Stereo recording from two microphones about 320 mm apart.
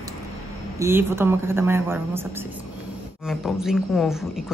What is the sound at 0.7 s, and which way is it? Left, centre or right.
A woman's voice, centre.